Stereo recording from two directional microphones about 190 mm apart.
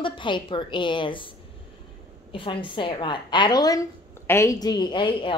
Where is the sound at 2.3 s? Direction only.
25° left (ahead or behind).